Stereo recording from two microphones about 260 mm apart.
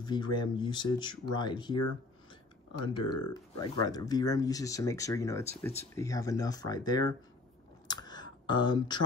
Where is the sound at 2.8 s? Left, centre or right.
Centre.